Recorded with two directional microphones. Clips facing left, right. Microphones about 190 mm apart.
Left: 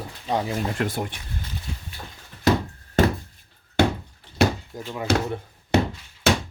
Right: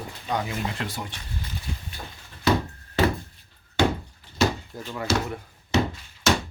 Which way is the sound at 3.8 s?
55° left (ahead or behind).